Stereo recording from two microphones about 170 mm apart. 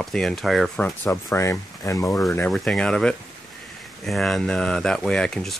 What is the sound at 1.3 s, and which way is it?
Speech, 15° left (ahead or behind).